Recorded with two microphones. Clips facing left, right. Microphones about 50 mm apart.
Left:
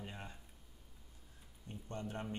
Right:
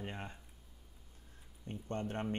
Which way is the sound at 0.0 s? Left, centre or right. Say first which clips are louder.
Right 5 dB; right.